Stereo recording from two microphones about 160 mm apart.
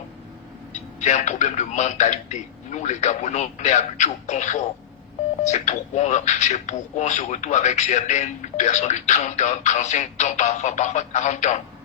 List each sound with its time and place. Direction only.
0.7 s a man's voice: 50° left (ahead or behind)